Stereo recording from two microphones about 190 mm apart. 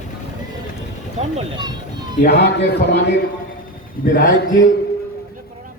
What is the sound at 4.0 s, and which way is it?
Speech, 45° left (ahead or behind).